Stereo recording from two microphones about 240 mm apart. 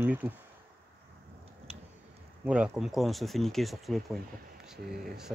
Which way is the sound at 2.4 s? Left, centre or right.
Centre.